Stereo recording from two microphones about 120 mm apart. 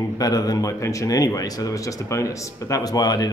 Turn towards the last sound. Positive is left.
turn(degrees=35)  # may be behind; listen again after turning